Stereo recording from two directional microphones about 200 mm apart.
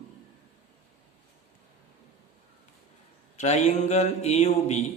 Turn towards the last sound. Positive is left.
turn(degrees=35)  # may be behind; listen again after turning